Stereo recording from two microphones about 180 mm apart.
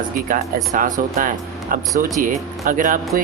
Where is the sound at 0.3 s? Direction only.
50° right (ahead or behind).